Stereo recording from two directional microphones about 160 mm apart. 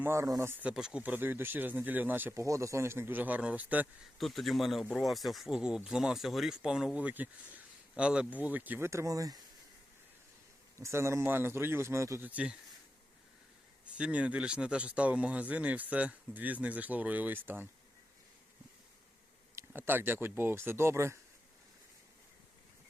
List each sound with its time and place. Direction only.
0.0 s speech: 15° right (ahead or behind)
0.6 s speech: 5° right (ahead or behind)
4.2 s speech: centre (ahead or behind); by 9.4 s 20° right (ahead or behind)
10.8 s speech: 20° right (ahead or behind)
14.0 s speech: 10° right (ahead or behind)
19.5 s speech: 15° right (ahead or behind)